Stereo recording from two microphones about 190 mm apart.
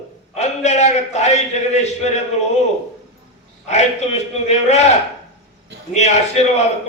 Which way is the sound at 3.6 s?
35° left (ahead or behind).